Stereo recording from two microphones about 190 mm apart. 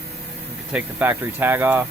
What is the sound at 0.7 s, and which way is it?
Speech, 10° right (ahead or behind).